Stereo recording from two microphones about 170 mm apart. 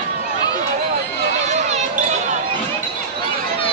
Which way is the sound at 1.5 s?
45° right (ahead or behind).